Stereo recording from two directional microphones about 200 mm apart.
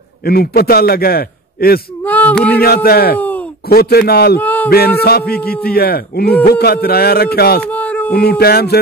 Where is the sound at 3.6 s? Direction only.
50° left (ahead or behind).